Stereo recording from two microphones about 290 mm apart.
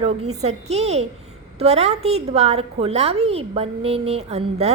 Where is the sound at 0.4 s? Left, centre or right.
Right.